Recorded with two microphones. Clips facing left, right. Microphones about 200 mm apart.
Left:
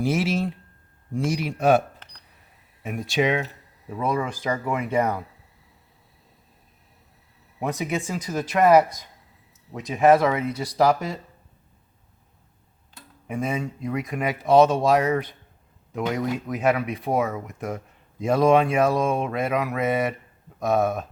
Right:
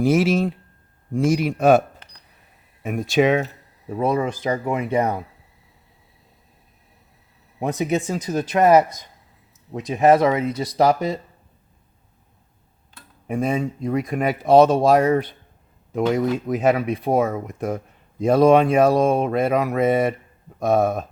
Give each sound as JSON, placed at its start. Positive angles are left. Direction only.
{"t": 0.0, "sound": "speech", "side_deg": -45}
{"t": 2.8, "sound": "speech", "side_deg": -50}
{"t": 3.8, "sound": "speech", "side_deg": -30}
{"t": 7.7, "sound": "speech", "side_deg": -20}
{"t": 9.7, "sound": "speech", "side_deg": -25}
{"t": 13.4, "sound": "speech", "side_deg": -35}